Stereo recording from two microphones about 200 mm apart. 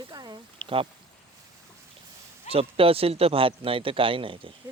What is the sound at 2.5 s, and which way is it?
Speech, 30° right (ahead or behind).